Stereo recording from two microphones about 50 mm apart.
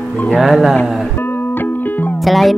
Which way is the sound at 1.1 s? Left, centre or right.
Left.